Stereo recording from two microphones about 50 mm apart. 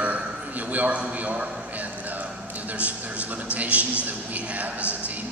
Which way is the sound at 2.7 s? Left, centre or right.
Right.